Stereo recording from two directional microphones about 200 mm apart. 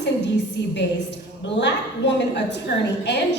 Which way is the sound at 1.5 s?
65° left (ahead or behind).